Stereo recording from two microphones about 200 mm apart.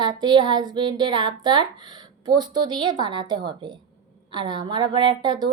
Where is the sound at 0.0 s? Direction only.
20° right (ahead or behind).